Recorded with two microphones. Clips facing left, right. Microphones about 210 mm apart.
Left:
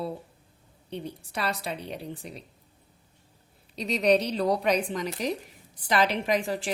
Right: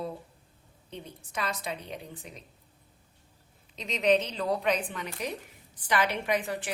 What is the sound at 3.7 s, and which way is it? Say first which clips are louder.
A woman's voice: left 2 dB; 35° left (ahead or behind).